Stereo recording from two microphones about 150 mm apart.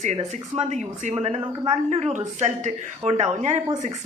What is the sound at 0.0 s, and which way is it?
A man's voice, 50° right (ahead or behind).